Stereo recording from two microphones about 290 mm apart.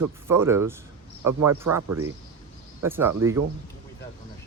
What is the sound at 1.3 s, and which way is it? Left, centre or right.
Speech, right.